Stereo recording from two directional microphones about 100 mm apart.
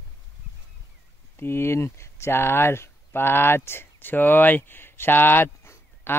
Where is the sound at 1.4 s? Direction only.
25° left (ahead or behind).